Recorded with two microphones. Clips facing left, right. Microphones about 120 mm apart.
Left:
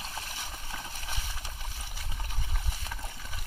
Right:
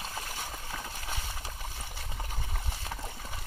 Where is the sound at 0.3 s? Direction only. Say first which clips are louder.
Right 2 dB; 40° right (ahead or behind).